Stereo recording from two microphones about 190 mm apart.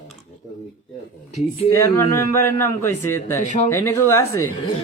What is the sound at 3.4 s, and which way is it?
Speech, 40° left (ahead or behind).